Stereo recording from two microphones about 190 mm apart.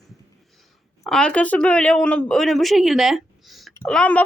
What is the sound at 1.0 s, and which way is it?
A woman's voice, 5° left (ahead or behind).